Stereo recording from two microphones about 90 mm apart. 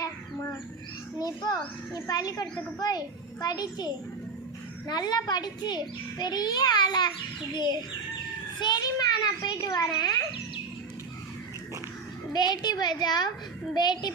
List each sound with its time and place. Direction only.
0.0 s bird: 25° left (ahead or behind)
1.2 s a child's voice: 50° left (ahead or behind)
12.3 s a child's voice: 50° left (ahead or behind)